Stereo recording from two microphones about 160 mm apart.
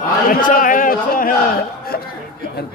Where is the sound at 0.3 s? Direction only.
60° left (ahead or behind).